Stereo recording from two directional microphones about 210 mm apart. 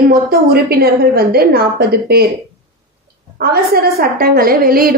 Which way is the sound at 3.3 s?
45° right (ahead or behind).